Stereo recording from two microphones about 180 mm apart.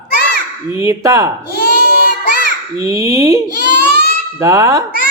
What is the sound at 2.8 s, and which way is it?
Speech, 15° right (ahead or behind).